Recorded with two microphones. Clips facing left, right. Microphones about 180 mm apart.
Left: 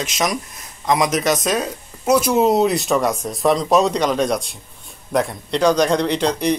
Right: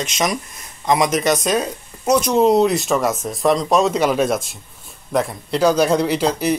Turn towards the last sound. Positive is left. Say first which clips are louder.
# even
turn(degrees=-5)  # may be behind; listen again after turning